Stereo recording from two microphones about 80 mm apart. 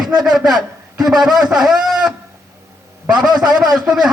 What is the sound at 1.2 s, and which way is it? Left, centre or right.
Speech, centre.